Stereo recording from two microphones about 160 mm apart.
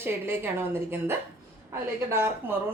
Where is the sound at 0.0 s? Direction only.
15° right (ahead or behind).